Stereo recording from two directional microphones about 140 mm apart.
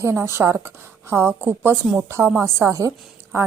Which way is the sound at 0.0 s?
20° right (ahead or behind).